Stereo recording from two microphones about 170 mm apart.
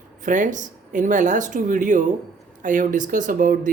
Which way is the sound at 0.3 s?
50° right (ahead or behind).